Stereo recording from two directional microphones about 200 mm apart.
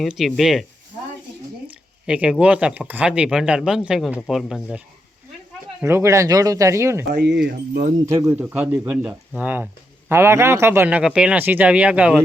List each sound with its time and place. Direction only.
0.0 s speech: centre (ahead or behind)
1.6 s speech: 5° right (ahead or behind)
5.8 s a man's voice: 15° right (ahead or behind)
7.1 s speech: 55° right (ahead or behind)
8.0 s a man's voice: 15° right (ahead or behind)